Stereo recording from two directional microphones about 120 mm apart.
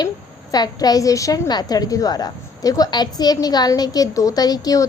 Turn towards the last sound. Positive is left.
turn(degrees=30)  # may be behind; listen again after turning